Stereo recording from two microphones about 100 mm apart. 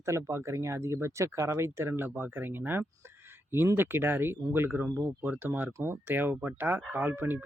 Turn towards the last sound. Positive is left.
turn(degrees=-20)  # may be behind; listen again after turning